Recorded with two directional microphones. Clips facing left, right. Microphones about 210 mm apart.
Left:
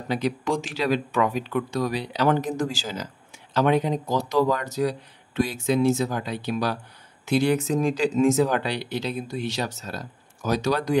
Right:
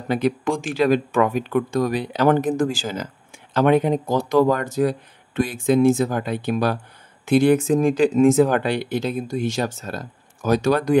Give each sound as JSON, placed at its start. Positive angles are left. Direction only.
{"t": 0.1, "sound": "speech", "side_deg": -55}